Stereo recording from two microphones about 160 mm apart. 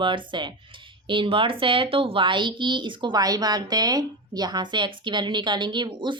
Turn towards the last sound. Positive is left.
turn(degrees=-30)  # may be behind; listen again after turning